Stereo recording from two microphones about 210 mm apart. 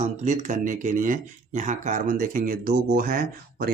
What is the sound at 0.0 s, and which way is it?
Speech, 35° right (ahead or behind).